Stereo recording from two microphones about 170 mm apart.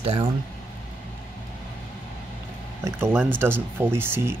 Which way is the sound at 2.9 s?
15° right (ahead or behind).